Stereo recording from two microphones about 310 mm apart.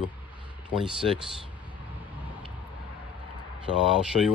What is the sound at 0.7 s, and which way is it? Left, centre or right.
Speech, centre.